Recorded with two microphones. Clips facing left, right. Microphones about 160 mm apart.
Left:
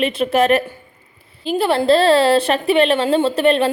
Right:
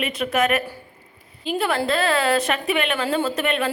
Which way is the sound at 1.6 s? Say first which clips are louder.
Left 8 dB; 30° left (ahead or behind).